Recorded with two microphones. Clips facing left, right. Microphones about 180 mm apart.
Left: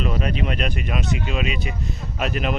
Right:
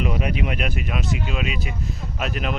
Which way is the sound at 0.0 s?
15° right (ahead or behind).